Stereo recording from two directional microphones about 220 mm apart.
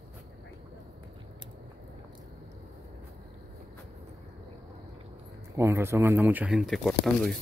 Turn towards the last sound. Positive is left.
turn(degrees=0)  # may be behind; listen again after turning